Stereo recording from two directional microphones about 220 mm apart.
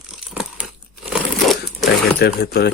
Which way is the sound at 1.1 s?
Centre (ahead or behind).